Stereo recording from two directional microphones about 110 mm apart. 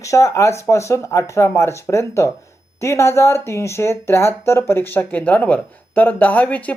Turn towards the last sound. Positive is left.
turn(degrees=15)  # may be behind; listen again after turning